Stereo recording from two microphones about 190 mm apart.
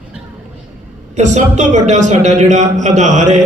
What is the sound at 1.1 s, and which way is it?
Speech, 40° right (ahead or behind).